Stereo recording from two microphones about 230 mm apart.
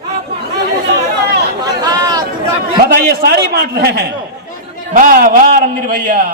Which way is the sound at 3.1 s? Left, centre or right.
Right.